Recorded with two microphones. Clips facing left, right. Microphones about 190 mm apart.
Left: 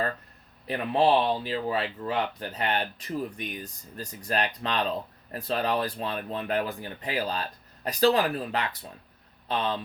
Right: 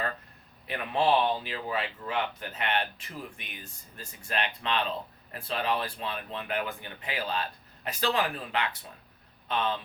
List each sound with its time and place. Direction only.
0.7 s speech: 35° left (ahead or behind)